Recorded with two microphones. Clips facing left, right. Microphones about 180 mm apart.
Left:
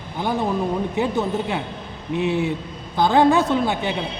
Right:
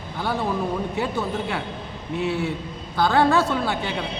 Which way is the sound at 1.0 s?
20° left (ahead or behind).